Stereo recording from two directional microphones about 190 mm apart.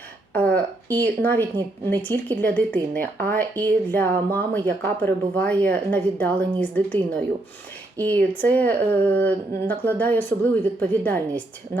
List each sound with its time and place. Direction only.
0.3 s a woman's voice: 5° left (ahead or behind)
3.0 s speech: 50° right (ahead or behind)
3.3 s speech: 10° left (ahead or behind)